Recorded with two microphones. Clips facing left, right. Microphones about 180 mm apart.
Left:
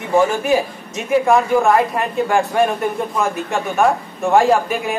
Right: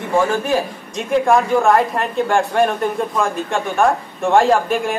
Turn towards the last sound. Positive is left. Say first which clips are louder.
# even
turn(degrees=0)  # may be behind; listen again after turning